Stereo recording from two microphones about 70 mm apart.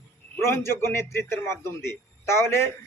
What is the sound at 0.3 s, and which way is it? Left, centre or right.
A man's voice, left.